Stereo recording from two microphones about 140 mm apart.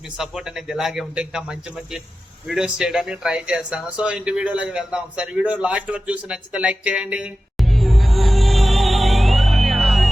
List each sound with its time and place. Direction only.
0.2 s a man's voice: 5° right (ahead or behind)